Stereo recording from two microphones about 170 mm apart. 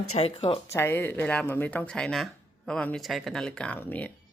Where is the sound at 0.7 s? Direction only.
15° left (ahead or behind).